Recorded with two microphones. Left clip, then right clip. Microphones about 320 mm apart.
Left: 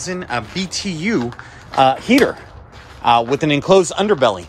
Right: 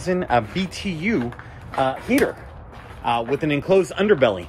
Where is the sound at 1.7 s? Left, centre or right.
Left; by 4.4 s centre.